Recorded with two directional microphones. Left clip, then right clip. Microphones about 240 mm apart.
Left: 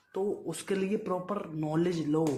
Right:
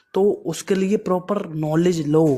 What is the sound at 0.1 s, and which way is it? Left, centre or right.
Speech, right.